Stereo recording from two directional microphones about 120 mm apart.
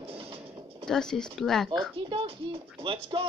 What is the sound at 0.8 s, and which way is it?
Speech, 5° left (ahead or behind).